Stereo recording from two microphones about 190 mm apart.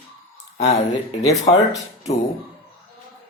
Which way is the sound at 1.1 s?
35° left (ahead or behind).